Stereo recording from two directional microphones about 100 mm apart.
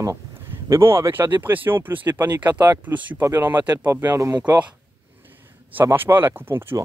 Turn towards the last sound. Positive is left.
turn(degrees=-25)  # may be behind; listen again after turning